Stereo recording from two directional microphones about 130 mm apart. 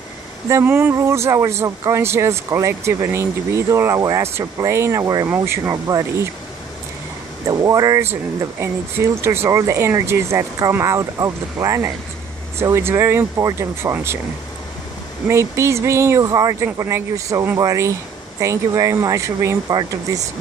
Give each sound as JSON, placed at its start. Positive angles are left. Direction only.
{"t": 0.5, "sound": "speech", "side_deg": -20}
{"t": 7.4, "sound": "speech", "side_deg": -25}
{"t": 15.2, "sound": "speech", "side_deg": -20}